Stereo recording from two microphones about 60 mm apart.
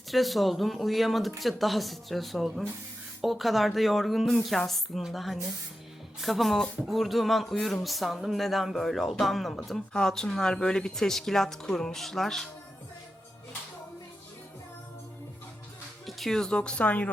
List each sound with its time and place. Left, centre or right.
0.1 s speech: centre
16.0 s speech: centre; by 17.1 s left